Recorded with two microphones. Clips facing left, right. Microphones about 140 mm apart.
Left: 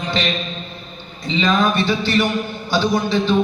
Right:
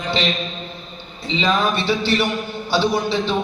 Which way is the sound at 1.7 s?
30° right (ahead or behind).